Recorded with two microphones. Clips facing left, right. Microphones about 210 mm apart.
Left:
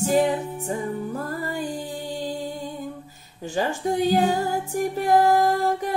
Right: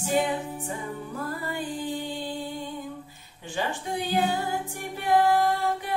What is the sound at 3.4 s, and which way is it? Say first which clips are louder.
Speech: left 6 dB; 40° left (ahead or behind).